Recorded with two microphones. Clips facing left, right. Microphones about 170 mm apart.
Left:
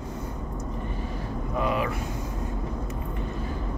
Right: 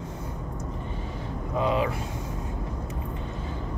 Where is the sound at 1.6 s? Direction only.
25° right (ahead or behind).